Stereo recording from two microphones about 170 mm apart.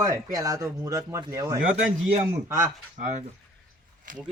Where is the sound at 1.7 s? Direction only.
45° right (ahead or behind).